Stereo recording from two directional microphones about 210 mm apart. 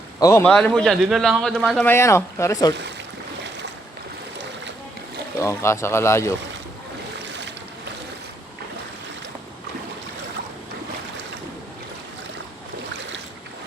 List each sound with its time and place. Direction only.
0.2 s a man's voice: 15° left (ahead or behind)
5.4 s speech: 15° left (ahead or behind)